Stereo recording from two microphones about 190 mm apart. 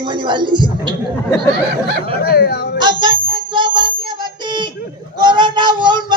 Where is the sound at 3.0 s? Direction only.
25° right (ahead or behind).